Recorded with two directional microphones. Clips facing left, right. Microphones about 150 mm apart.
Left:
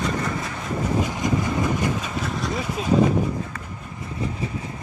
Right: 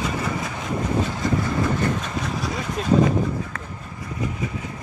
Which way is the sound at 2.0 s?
Centre (ahead or behind).